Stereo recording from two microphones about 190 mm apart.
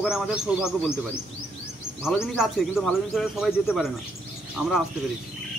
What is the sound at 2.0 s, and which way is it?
Speech, 5° right (ahead or behind).